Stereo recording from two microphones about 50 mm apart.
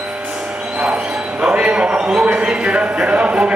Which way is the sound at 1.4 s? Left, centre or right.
Right.